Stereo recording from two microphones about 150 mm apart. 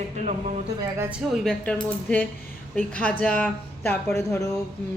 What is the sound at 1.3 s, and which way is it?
A man's voice, 5° left (ahead or behind).